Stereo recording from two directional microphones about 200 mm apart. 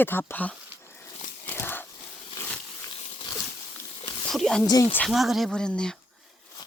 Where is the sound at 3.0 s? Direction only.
30° left (ahead or behind).